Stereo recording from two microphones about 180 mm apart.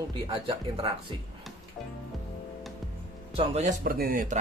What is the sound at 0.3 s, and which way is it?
Speech, 30° right (ahead or behind).